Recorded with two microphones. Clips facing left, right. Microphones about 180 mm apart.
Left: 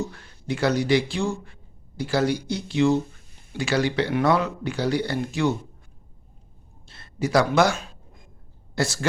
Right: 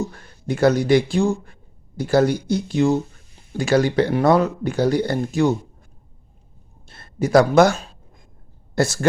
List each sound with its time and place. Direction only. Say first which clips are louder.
0.1 s speech: right 3 dB; 45° right (ahead or behind)
6.8 s speech: right 4 dB; 50° right (ahead or behind)